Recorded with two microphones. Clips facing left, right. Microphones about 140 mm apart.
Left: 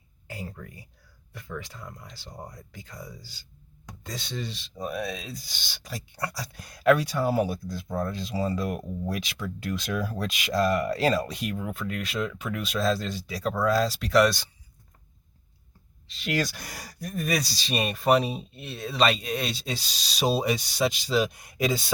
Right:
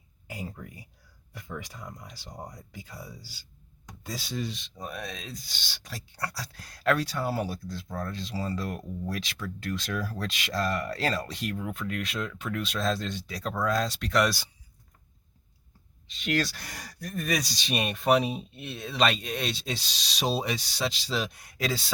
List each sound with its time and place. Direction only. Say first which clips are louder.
0.3 s a sound: even; 15° right (ahead or behind)
1.3 s speech: left 2 dB; 15° right (ahead or behind)
16.0 s speech: even; 5° left (ahead or behind)